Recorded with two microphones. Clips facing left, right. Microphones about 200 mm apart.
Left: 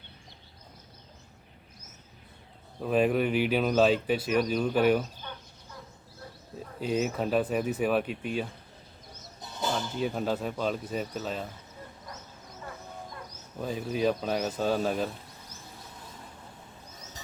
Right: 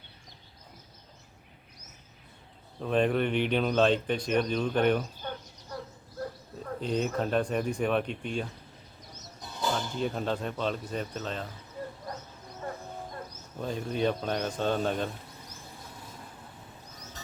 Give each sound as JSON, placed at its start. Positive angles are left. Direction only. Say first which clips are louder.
{"t": 2.8, "sound": "speech", "louder": "left 1 dB", "side_deg": 5}
{"t": 5.7, "sound": "a sound", "louder": "right 8 dB", "side_deg": -40}
{"t": 6.7, "sound": "speech", "louder": "left 1 dB", "side_deg": 5}
{"t": 9.7, "sound": "speech", "louder": "left 3 dB", "side_deg": 5}
{"t": 12.1, "sound": "a sound", "louder": "right 5 dB", "side_deg": -45}
{"t": 13.6, "sound": "speech", "louder": "left 1 dB", "side_deg": 5}